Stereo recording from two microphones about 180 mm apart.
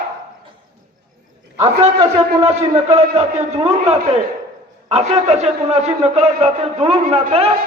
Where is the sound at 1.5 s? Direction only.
35° right (ahead or behind).